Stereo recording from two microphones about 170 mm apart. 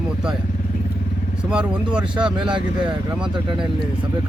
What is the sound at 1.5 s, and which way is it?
Speech, 5° right (ahead or behind).